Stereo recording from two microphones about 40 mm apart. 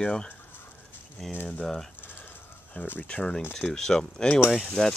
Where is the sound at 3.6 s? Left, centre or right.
Centre.